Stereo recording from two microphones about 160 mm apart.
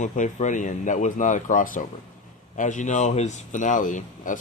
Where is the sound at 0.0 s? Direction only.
50° left (ahead or behind).